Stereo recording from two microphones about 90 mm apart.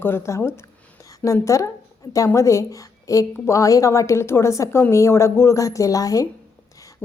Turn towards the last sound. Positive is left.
turn(degrees=40)  # may be behind; listen again after turning